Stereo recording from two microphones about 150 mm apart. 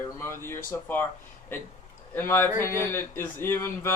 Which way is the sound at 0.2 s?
15° left (ahead or behind).